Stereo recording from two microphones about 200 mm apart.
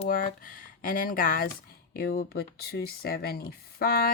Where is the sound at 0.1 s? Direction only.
45° left (ahead or behind).